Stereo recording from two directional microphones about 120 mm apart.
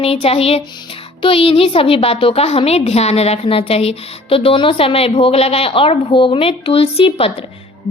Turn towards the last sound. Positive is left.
turn(degrees=50)  # may be behind; listen again after turning